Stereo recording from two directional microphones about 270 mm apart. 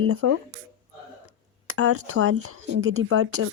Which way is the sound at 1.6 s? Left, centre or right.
Right.